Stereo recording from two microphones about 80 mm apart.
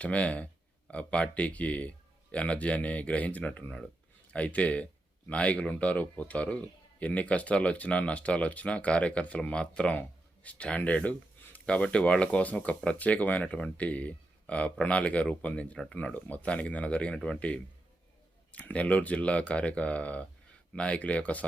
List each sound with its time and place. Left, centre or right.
0.0 s speech: centre